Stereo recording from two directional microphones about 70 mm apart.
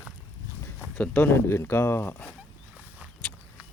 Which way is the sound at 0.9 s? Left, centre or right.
Left.